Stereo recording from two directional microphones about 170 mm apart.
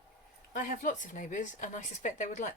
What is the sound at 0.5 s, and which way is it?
Speech, 50° left (ahead or behind).